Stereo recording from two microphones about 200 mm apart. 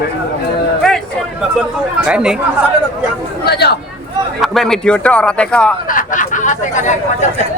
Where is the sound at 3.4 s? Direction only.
55° left (ahead or behind).